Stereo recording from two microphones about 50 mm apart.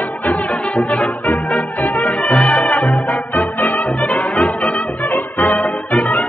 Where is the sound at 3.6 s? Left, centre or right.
Left.